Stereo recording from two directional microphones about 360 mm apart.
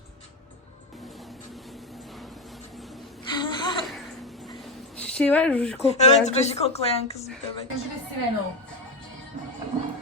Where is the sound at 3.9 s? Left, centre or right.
Centre.